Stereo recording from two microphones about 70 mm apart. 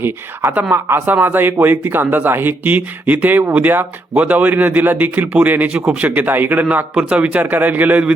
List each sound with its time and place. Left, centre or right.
0.0 s speech: right